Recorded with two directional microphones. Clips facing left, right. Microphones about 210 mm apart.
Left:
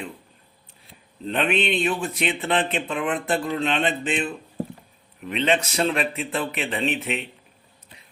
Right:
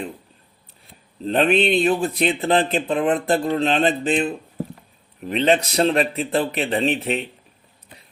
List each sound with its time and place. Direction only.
1.2 s speech: 35° right (ahead or behind)